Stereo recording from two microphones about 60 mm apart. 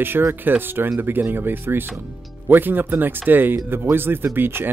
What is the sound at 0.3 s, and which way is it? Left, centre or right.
Speech, right.